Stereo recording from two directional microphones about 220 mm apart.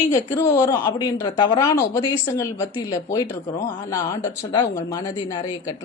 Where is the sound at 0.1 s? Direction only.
15° left (ahead or behind).